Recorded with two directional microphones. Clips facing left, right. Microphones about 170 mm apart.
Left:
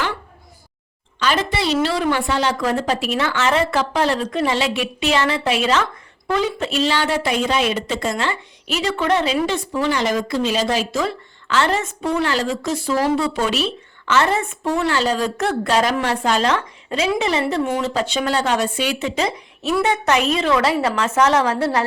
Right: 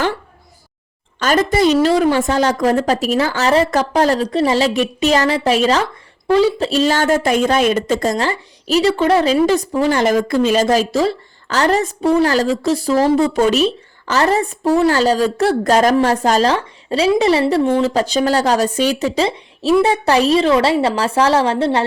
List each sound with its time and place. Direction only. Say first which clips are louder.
1.2 s a woman's voice: right 7 dB; 45° right (ahead or behind); by 21.8 s 30° right (ahead or behind)